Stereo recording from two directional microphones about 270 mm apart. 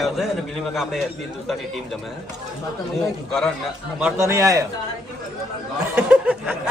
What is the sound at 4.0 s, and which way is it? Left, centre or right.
Speech, centre.